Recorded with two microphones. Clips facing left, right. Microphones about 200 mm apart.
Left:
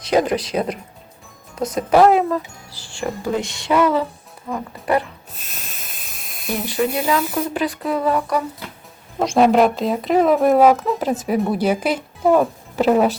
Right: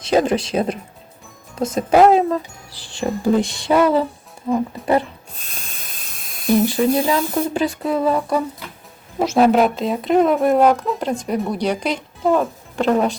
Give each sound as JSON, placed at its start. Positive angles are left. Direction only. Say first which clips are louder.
{"t": 0.0, "sound": "speech", "louder": "right 1 dB", "side_deg": -25}
{"t": 3.4, "sound": "speech", "louder": "right 2 dB", "side_deg": -35}
{"t": 4.4, "sound": "speech", "louder": "right 4 dB", "side_deg": -20}
{"t": 5.3, "sound": "hiss", "louder": "even", "side_deg": 5}
{"t": 6.9, "sound": "speech", "louder": "right 2 dB", "side_deg": -25}
{"t": 9.1, "sound": "speech", "louder": "even", "side_deg": -5}